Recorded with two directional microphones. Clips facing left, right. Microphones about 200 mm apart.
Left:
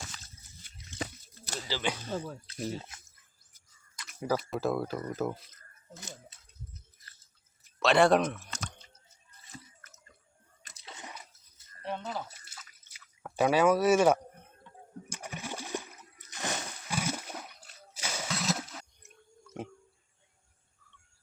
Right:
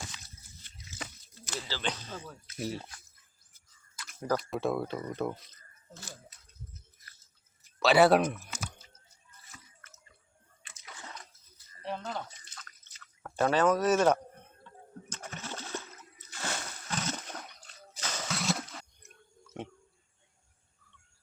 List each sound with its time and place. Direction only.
1.6 s speech: 10° left (ahead or behind)
2.1 s speech: 40° left (ahead or behind)
2.6 s speech: centre (ahead or behind)
3.9 s speech: centre (ahead or behind)
7.8 s a sound: 5° right (ahead or behind)
9.5 s drip: 40° left (ahead or behind)
10.6 s a sound: 40° left (ahead or behind)
10.8 s water: 20° left (ahead or behind)
11.1 s dog: 5° left (ahead or behind)
11.8 s drip: centre (ahead or behind)
15.1 s splash: 10° left (ahead or behind)
18.3 s a sound: centre (ahead or behind)